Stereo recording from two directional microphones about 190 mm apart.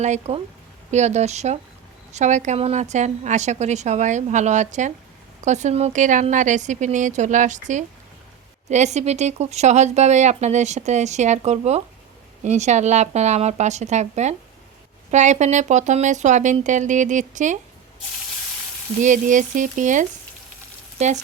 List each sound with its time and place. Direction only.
0.0 s speech: 35° right (ahead or behind)
18.9 s speech: 40° right (ahead or behind)